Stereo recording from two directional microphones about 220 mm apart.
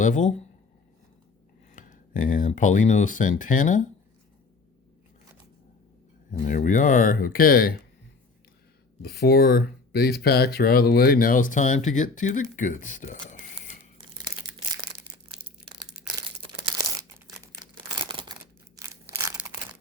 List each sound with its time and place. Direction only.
0.0 s speech: 35° left (ahead or behind)
1.7 s speech: 35° left (ahead or behind)
6.4 s speech: 35° left (ahead or behind)
9.0 s speech: 45° left (ahead or behind)
16.2 s crumpling: 20° right (ahead or behind)
18.8 s a sound: 10° right (ahead or behind)